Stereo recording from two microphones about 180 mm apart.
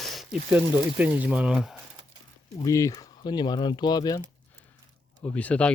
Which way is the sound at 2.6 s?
20° left (ahead or behind).